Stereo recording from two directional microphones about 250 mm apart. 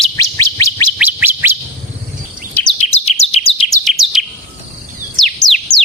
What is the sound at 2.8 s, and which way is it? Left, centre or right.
Bird, left.